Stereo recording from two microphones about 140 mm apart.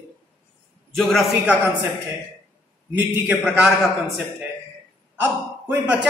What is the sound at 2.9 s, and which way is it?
Speech, 10° right (ahead or behind).